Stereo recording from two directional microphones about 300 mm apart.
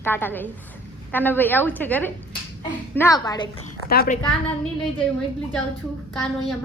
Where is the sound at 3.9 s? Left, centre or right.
Left.